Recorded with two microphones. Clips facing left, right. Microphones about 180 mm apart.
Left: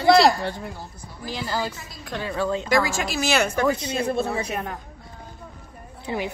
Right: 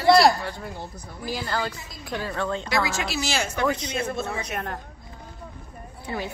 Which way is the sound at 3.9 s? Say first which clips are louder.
Left 4 dB; 35° left (ahead or behind).